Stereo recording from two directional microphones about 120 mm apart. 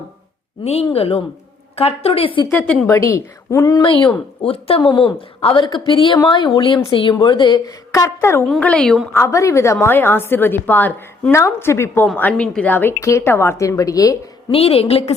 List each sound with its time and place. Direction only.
0.6 s a woman's voice: 55° left (ahead or behind)
2.5 s a woman's voice: 10° left (ahead or behind)
2.8 s a woman's voice: 25° left (ahead or behind)
3.8 s a woman's voice: 45° left (ahead or behind)
8.0 s a woman's voice: 20° left (ahead or behind)
8.4 s a woman's voice: 5° left (ahead or behind)
9.1 s a woman's voice: 25° left (ahead or behind)
14.5 s a woman's voice: 55° left (ahead or behind)